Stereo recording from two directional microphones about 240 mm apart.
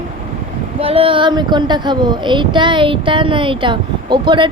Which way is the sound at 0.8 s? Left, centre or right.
Right.